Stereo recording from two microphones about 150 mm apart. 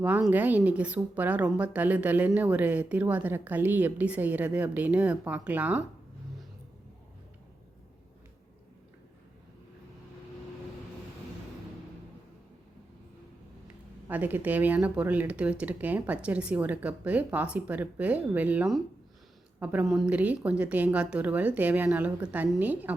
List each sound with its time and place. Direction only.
0.3 s a woman's voice: 10° right (ahead or behind)
14.1 s a woman's voice: 10° right (ahead or behind)